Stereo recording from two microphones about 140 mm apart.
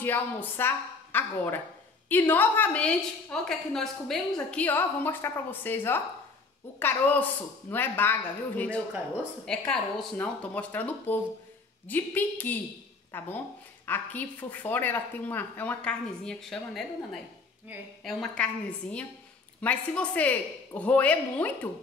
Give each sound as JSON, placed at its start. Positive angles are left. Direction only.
{"t": 0.0, "sound": "a woman's voice", "side_deg": 15}
{"t": 17.7, "sound": "a woman's voice", "side_deg": -15}
{"t": 18.0, "sound": "a woman's voice", "side_deg": 5}